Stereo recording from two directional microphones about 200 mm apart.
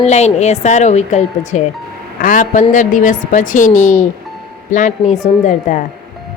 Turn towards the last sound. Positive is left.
turn(degrees=40)  # may be behind; listen again after turning